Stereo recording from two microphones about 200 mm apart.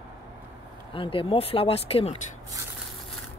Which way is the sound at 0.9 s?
25° left (ahead or behind).